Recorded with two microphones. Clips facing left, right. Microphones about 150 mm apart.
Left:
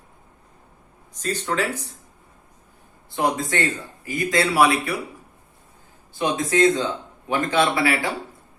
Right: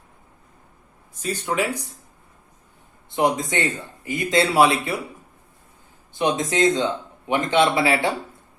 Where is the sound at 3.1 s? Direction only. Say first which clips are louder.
Right 2 dB; 20° right (ahead or behind).